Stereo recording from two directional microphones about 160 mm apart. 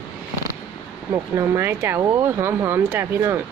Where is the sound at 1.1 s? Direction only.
20° right (ahead or behind).